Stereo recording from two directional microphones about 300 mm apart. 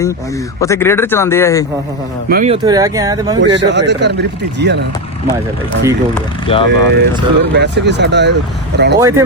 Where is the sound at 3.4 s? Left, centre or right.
Right.